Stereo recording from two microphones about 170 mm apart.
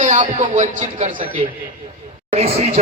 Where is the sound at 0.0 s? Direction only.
45° right (ahead or behind).